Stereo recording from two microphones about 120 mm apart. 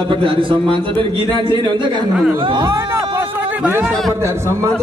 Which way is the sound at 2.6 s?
25° right (ahead or behind).